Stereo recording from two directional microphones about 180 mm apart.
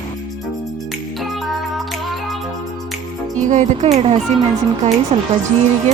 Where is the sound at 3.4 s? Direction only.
40° right (ahead or behind).